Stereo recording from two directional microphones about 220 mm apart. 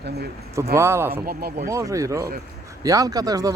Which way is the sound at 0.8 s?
10° right (ahead or behind).